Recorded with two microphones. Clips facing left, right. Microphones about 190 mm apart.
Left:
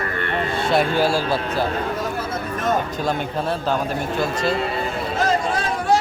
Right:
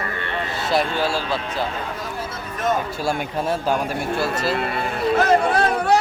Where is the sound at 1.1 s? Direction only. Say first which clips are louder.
Left 3 dB; 40° left (ahead or behind).